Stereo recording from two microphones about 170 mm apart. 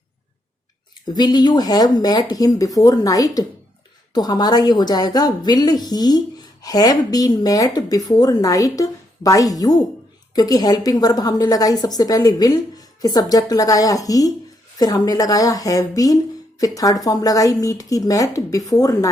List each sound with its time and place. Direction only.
1.0 s a woman's voice: 25° left (ahead or behind)